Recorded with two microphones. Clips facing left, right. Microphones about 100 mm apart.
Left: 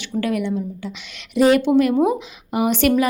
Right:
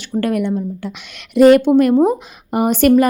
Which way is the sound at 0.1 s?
50° right (ahead or behind).